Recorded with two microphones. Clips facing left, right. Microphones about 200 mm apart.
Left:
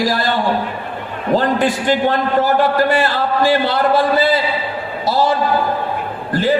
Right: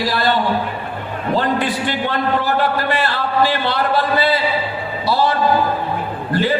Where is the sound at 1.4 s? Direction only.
45° left (ahead or behind).